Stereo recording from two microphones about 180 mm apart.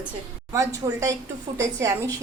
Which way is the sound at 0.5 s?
20° right (ahead or behind).